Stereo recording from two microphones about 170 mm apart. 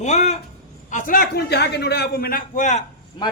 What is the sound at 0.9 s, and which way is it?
A man's voice, 55° left (ahead or behind).